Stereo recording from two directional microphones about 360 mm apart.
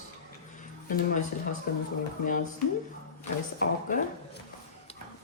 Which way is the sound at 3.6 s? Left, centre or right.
Left.